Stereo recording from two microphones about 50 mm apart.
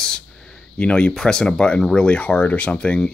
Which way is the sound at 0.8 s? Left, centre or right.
Left.